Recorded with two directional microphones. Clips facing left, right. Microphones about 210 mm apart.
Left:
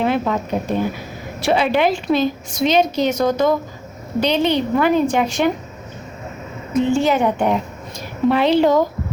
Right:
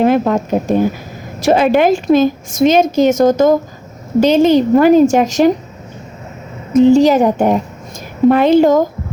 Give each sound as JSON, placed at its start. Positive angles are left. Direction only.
{"t": 0.0, "sound": "a woman's voice", "side_deg": -45}
{"t": 6.7, "sound": "a woman's voice", "side_deg": -40}